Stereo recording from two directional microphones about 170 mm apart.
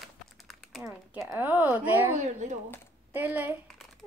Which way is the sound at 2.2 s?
45° right (ahead or behind).